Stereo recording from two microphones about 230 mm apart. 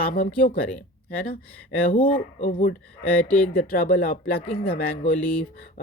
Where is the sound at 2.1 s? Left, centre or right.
Left.